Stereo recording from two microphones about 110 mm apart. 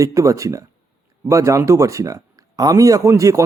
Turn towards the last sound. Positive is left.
turn(degrees=-30)  # may be behind; listen again after turning